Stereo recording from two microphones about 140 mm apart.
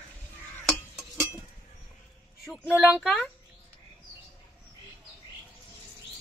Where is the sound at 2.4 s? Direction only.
5° right (ahead or behind).